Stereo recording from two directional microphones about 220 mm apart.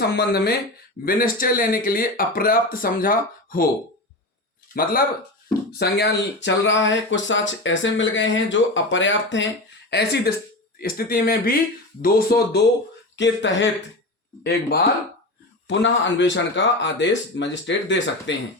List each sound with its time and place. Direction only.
0.0 s speech: 45° left (ahead or behind)
4.7 s speech: 40° left (ahead or behind)
13.1 s speech: 55° left (ahead or behind)
15.6 s speech: 55° left (ahead or behind)